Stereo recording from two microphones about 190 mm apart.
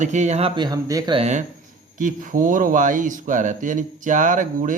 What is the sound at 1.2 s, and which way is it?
Speech, 40° right (ahead or behind).